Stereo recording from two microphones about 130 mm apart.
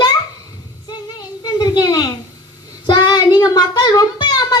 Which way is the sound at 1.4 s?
30° left (ahead or behind).